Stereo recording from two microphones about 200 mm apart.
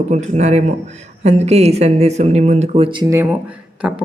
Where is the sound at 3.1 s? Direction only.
10° right (ahead or behind).